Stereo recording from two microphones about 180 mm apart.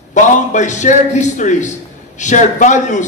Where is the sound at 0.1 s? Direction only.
40° left (ahead or behind).